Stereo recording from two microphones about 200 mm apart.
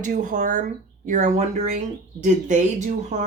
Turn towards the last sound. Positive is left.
turn(degrees=-35)  # may be behind; listen again after turning